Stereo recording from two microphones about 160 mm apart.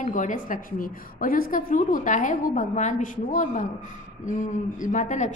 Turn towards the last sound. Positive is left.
turn(degrees=50)  # may be behind; listen again after turning